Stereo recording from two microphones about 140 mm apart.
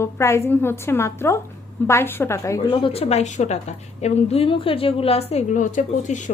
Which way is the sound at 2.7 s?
40° left (ahead or behind).